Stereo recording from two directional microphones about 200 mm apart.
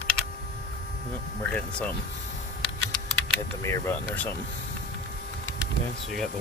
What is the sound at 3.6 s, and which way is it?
Speech, 15° left (ahead or behind).